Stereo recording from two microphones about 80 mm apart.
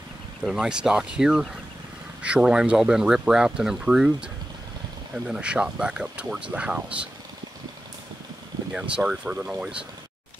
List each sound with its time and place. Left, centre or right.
0.5 s speech: centre
8.7 s speech: centre